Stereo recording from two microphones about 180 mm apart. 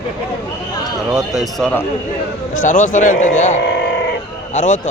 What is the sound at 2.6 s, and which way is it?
Speech, 45° left (ahead or behind).